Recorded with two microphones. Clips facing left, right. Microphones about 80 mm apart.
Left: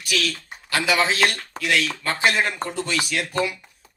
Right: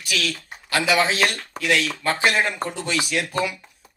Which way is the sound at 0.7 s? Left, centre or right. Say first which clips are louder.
Right 1 dB; right.